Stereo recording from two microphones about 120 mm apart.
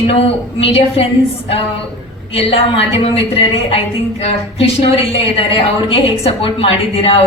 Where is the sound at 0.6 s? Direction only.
55° left (ahead or behind).